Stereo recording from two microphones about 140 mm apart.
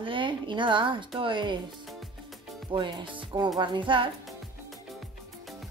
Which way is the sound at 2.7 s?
35° right (ahead or behind).